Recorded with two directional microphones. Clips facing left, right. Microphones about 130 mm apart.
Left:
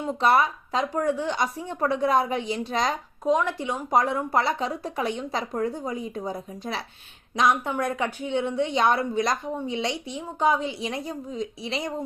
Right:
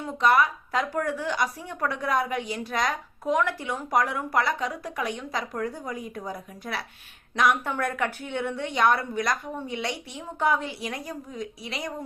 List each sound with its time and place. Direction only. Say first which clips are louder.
0.0 s speech: left 1 dB; 30° left (ahead or behind)